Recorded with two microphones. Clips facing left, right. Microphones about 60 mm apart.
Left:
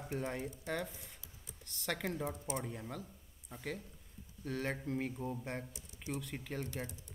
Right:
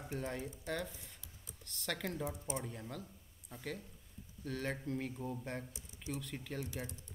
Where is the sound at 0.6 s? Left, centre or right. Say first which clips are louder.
Even; centre.